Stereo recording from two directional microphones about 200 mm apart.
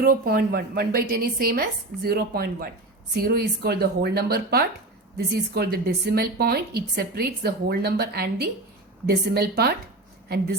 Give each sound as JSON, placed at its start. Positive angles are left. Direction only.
{"t": 0.0, "sound": "a woman's voice", "side_deg": -50}